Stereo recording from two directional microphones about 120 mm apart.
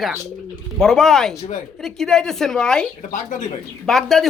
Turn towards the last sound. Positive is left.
turn(degrees=5)  # may be behind; listen again after turning